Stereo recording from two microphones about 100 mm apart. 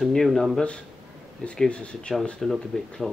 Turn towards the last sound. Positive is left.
turn(degrees=0)  # may be behind; listen again after turning